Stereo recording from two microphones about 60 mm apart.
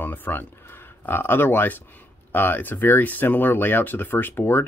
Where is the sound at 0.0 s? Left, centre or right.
Left.